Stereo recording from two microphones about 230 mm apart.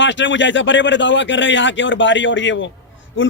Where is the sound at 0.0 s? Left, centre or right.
Left.